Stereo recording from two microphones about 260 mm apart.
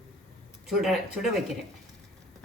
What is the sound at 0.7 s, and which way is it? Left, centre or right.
Speech, centre.